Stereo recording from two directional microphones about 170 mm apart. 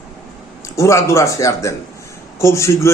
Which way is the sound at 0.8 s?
15° left (ahead or behind).